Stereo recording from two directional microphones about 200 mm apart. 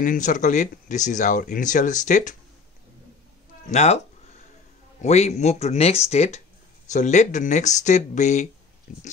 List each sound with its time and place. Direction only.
0.0 s speech: 40° left (ahead or behind)
3.7 s speech: 35° left (ahead or behind)
5.0 s speech: 35° left (ahead or behind)